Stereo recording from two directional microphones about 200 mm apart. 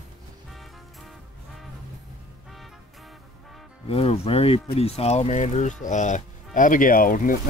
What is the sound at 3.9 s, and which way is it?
Speech, 30° left (ahead or behind).